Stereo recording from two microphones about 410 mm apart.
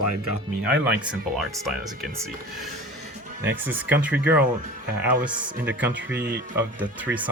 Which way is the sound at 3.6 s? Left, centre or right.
Centre.